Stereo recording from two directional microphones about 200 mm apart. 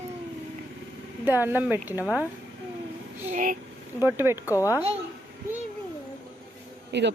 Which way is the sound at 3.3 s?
40° right (ahead or behind).